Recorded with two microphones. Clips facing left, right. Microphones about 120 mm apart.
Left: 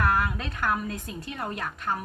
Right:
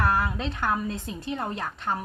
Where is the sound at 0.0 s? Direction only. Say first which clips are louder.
Right 1 dB; 25° right (ahead or behind).